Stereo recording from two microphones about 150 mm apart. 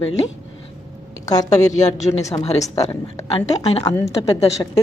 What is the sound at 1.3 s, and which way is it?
Speech, 25° left (ahead or behind).